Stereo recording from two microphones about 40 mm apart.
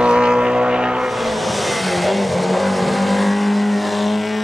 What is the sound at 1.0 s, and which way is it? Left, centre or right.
Vehicle, centre.